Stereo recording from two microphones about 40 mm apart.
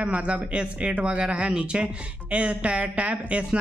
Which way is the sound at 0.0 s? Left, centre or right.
Right.